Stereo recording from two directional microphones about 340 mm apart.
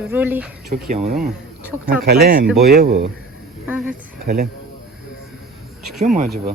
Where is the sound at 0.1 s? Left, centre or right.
Centre.